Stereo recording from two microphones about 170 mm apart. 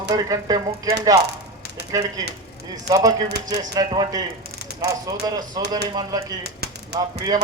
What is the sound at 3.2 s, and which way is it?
Speech, 75° right (ahead or behind).